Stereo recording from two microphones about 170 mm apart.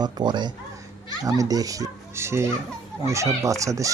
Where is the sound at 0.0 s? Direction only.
25° right (ahead or behind).